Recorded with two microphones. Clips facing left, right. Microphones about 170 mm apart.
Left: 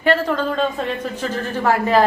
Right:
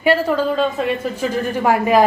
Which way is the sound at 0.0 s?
10° right (ahead or behind).